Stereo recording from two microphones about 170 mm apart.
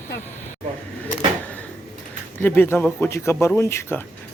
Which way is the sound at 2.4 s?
15° left (ahead or behind).